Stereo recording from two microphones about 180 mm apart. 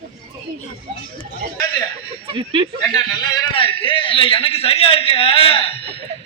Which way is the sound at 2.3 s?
25° right (ahead or behind).